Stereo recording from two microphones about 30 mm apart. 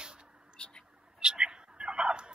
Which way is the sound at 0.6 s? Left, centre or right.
Left.